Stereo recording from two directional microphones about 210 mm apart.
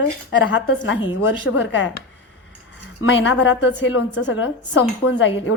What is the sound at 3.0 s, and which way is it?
A woman's voice, 65° left (ahead or behind).